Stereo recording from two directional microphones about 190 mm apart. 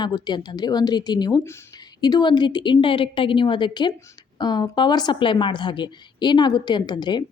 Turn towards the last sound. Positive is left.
turn(degrees=25)  # may be behind; listen again after turning